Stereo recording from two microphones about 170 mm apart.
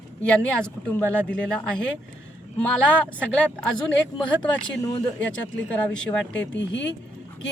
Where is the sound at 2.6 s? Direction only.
5° left (ahead or behind).